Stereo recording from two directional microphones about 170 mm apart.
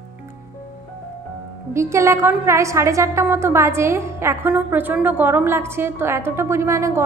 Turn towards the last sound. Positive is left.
turn(degrees=-15)  # may be behind; listen again after turning